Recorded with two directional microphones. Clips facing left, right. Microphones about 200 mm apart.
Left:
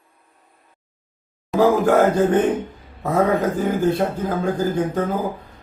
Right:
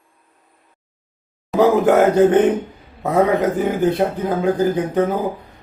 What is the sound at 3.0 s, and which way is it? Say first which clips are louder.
A man's voice: right 2 dB; 20° right (ahead or behind).